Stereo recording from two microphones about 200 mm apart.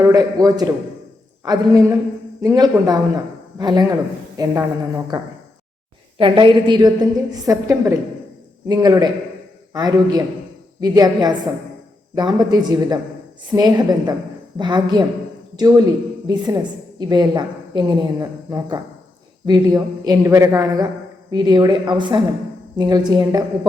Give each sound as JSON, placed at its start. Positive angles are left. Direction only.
{"t": 0.0, "sound": "a man's voice", "side_deg": -20}